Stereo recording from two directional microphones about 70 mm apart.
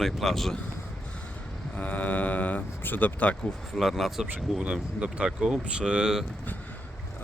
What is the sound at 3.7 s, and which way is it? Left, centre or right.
Speech, centre.